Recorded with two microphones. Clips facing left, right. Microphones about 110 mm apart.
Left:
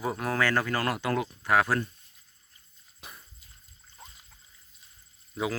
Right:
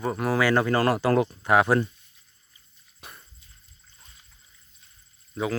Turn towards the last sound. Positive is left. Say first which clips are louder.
# right 3 dB
turn(degrees=0)  # may be behind; listen again after turning